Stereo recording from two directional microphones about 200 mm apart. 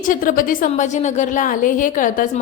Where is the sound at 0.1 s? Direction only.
45° left (ahead or behind).